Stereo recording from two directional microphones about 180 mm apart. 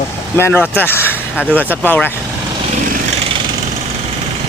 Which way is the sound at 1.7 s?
10° left (ahead or behind).